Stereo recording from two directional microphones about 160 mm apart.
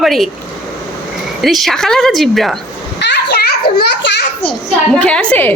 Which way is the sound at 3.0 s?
90° left.